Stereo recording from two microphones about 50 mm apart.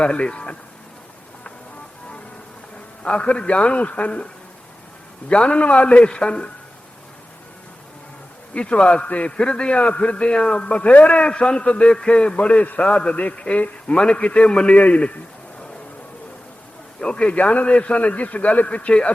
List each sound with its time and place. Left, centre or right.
0.0 s a man's voice: centre
3.0 s a man's voice: left
5.3 s a man's voice: left
8.5 s a man's voice: left
17.0 s a man's voice: left